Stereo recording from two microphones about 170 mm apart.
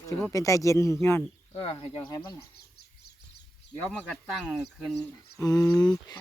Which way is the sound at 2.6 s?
75° left (ahead or behind).